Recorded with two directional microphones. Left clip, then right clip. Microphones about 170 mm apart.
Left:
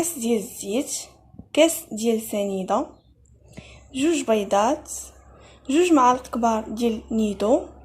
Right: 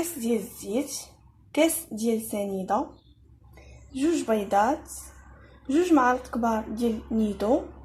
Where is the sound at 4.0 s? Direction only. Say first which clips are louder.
Left 4 dB; 20° left (ahead or behind).